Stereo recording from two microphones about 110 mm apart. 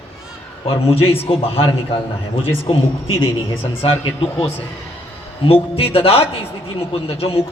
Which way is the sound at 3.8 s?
65° left (ahead or behind).